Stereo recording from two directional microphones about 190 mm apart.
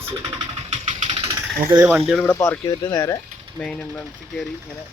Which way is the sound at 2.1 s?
5° left (ahead or behind).